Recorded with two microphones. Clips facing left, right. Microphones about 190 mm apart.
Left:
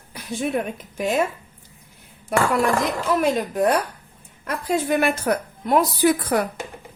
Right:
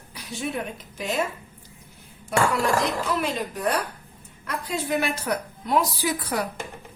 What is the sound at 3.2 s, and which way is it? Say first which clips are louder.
A woman's voice: left 7 dB; 50° left (ahead or behind).